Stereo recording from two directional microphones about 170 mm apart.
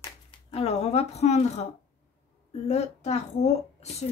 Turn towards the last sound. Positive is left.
turn(degrees=40)  # may be behind; listen again after turning